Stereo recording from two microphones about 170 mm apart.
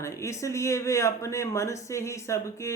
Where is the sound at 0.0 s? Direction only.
15° left (ahead or behind).